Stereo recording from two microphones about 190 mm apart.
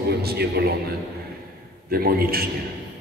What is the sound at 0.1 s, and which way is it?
Speech, 55° right (ahead or behind).